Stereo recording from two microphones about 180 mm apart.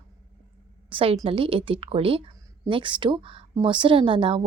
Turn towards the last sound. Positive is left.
turn(degrees=-30)  # may be behind; listen again after turning